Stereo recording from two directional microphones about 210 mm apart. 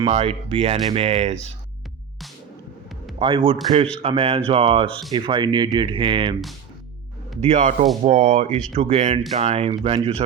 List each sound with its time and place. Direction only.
0.1 s speech: 30° right (ahead or behind)
3.2 s speech: 25° right (ahead or behind)
7.4 s speech: 35° right (ahead or behind)